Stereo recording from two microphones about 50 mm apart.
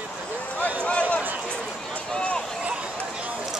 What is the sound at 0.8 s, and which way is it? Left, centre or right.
Run, left.